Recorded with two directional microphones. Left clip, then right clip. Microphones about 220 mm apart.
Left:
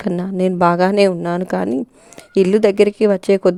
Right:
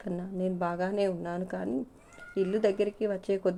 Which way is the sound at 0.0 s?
50° left (ahead or behind).